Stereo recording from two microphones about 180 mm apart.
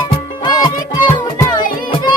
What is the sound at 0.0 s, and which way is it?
Music, 25° left (ahead or behind).